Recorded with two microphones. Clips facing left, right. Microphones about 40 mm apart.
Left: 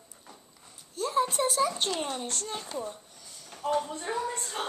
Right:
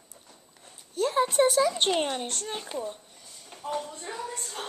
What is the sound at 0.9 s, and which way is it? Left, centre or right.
Speech, right.